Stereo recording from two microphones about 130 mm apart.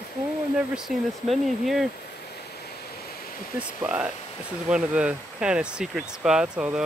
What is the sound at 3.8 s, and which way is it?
Speech, 10° right (ahead or behind).